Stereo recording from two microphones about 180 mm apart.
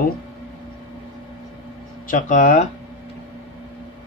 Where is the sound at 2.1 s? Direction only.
45° left (ahead or behind).